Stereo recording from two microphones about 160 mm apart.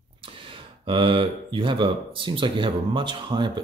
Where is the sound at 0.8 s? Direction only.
35° right (ahead or behind).